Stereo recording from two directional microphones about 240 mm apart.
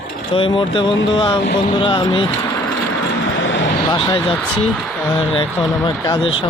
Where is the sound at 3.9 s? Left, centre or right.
Centre.